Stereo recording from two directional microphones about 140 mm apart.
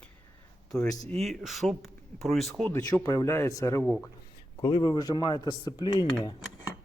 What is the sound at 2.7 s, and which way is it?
Speech, 15° left (ahead or behind).